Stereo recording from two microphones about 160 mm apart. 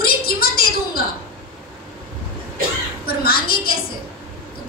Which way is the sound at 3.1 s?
70° left (ahead or behind).